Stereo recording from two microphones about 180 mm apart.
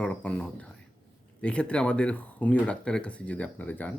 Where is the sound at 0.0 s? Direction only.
5° left (ahead or behind).